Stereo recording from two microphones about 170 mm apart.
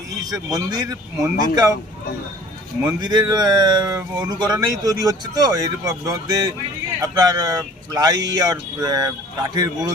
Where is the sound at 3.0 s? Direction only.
25° right (ahead or behind).